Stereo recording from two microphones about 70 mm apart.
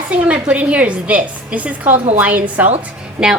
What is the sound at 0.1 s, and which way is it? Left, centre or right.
A woman's voice, centre.